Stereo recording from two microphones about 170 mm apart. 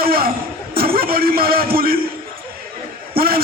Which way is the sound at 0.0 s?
60° right (ahead or behind).